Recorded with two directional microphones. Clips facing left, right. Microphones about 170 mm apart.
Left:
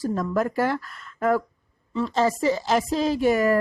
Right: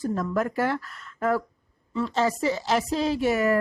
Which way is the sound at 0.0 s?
35° left (ahead or behind).